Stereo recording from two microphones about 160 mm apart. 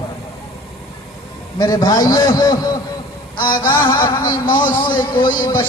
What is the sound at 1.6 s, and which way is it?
Speech, 25° left (ahead or behind).